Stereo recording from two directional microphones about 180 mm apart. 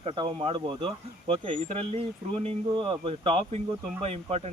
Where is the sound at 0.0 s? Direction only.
30° right (ahead or behind).